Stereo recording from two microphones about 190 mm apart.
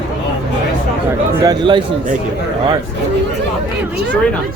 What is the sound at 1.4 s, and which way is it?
Speech, 25° right (ahead or behind).